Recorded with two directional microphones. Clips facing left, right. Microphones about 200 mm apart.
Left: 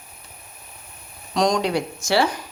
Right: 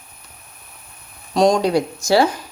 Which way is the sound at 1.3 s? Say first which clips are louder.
Right 5 dB; 30° right (ahead or behind).